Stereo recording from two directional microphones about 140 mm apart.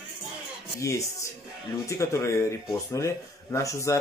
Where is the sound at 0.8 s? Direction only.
20° left (ahead or behind).